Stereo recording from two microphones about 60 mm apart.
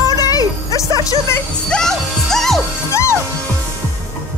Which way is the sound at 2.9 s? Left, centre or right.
Left.